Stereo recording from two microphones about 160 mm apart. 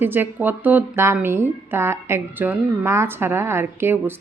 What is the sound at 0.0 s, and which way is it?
Speech, 10° right (ahead or behind).